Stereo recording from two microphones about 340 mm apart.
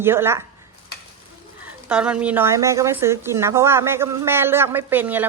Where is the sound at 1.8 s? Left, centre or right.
Centre.